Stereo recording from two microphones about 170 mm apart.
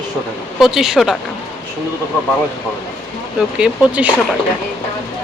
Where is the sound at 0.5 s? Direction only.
Centre (ahead or behind).